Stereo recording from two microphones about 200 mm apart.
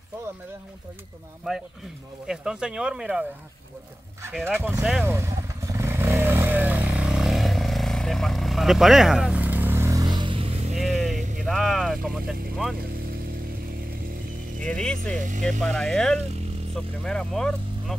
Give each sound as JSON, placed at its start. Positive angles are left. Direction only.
{"t": 1.5, "sound": "speech", "side_deg": -5}
{"t": 4.3, "sound": "speech", "side_deg": 0}
{"t": 4.6, "sound": "speech", "side_deg": -10}
{"t": 5.0, "sound": "motorcycle", "side_deg": -15}
{"t": 10.8, "sound": "vehicle", "side_deg": 0}
{"t": 11.4, "sound": "speech", "side_deg": 0}
{"t": 14.7, "sound": "speech", "side_deg": 5}
{"t": 15.1, "sound": "speech", "side_deg": -40}
{"t": 15.6, "sound": "speech", "side_deg": 5}